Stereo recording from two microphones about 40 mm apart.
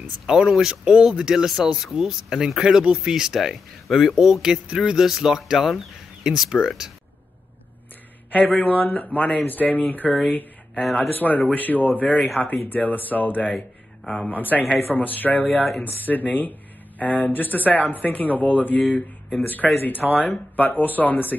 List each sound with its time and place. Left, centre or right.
0.3 s speech: centre
8.3 s speech: left
14.0 s speech: centre
14.3 s speech: left